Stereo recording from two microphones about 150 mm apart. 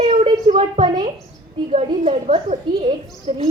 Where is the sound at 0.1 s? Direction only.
45° right (ahead or behind).